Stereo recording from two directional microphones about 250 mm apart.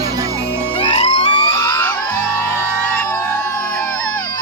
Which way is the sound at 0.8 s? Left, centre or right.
Left.